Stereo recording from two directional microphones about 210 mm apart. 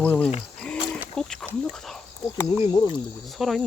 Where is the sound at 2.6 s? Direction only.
20° left (ahead or behind).